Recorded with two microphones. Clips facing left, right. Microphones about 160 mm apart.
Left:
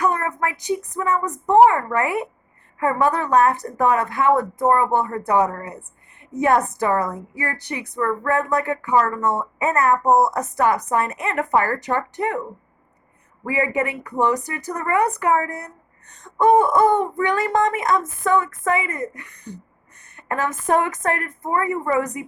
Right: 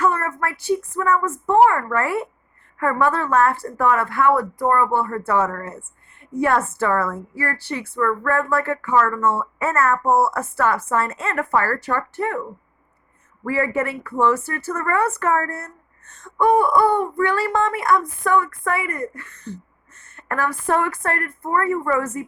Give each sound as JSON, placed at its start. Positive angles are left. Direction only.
{"t": 0.0, "sound": "a woman's voice", "side_deg": 15}